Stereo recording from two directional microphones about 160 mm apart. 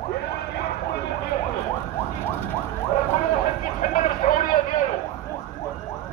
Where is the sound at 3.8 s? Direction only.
60° left (ahead or behind).